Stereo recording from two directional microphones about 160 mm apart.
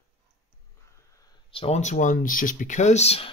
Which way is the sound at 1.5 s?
40° left (ahead or behind).